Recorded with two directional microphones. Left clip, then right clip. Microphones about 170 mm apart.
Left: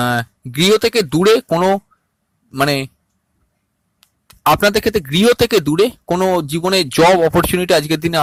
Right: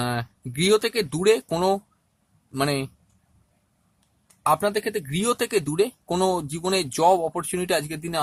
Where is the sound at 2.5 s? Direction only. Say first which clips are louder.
Left 9 dB; 35° left (ahead or behind).